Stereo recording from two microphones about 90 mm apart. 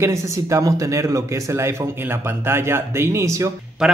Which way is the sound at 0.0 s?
35° right (ahead or behind).